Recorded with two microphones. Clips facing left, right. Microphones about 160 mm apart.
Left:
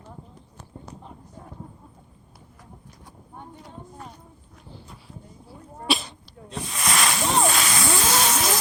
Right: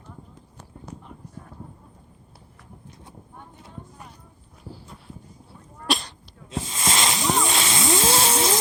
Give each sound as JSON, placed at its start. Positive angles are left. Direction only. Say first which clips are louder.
{"t": 4.7, "sound": "sneeze", "louder": "right 1 dB", "side_deg": 0}
{"t": 6.6, "sound": "snake", "louder": "even", "side_deg": -25}
{"t": 7.4, "sound": "music", "louder": "left 1 dB", "side_deg": -25}